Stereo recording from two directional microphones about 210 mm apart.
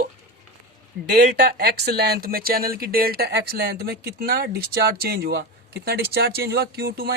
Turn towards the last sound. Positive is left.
turn(degrees=-45)  # may be behind; listen again after turning